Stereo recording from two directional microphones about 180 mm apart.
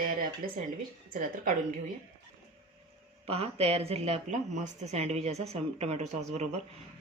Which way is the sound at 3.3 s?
35° right (ahead or behind).